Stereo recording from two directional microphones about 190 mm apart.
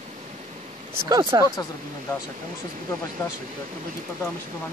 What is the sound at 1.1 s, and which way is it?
Speech, 15° right (ahead or behind).